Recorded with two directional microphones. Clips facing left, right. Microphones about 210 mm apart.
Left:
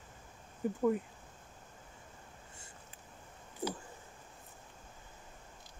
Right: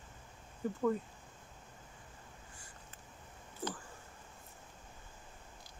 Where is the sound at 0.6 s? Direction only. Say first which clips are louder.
Left 3 dB; 15° left (ahead or behind).